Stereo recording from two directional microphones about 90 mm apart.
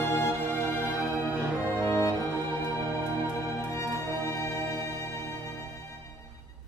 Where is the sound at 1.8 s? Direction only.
30° left (ahead or behind).